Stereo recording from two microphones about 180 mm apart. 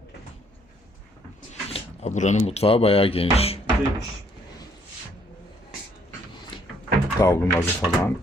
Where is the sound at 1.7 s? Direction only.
40° left (ahead or behind).